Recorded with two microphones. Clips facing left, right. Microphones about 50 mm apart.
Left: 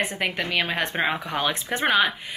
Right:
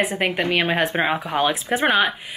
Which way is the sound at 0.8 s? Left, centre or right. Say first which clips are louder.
Right 4 dB; centre.